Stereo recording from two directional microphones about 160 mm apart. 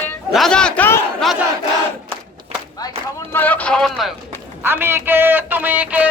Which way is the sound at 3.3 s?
10° left (ahead or behind).